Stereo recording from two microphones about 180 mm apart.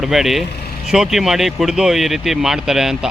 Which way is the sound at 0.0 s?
Centre (ahead or behind).